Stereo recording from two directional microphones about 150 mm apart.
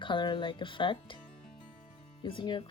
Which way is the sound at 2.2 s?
30° left (ahead or behind).